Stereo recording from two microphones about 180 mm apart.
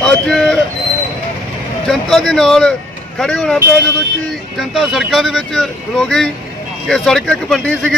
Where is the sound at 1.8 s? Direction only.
Centre (ahead or behind).